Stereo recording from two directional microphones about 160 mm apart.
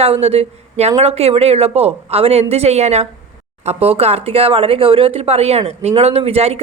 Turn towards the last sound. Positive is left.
turn(degrees=-40)  # may be behind; listen again after turning